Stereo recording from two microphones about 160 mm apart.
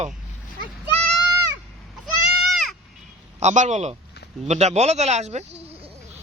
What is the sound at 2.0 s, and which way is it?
Goat, centre (ahead or behind).